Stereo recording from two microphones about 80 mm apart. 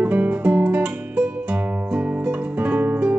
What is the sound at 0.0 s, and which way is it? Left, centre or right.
Music, right.